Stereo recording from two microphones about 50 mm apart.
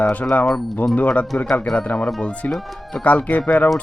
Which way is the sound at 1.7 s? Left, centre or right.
Left.